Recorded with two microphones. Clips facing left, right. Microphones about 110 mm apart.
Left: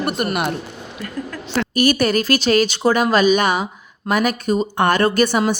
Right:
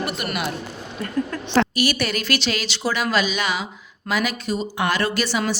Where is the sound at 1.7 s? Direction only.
45° left (ahead or behind).